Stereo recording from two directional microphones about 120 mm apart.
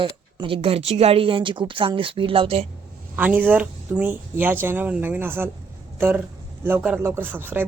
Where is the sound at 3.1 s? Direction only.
15° right (ahead or behind).